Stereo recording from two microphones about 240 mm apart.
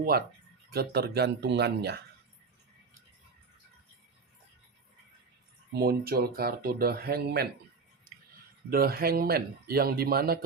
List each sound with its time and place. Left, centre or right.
0.7 s speech: right
5.7 s speech: right
8.7 s speech: right